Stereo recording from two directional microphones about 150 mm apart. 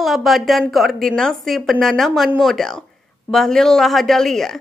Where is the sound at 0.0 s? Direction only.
Centre (ahead or behind).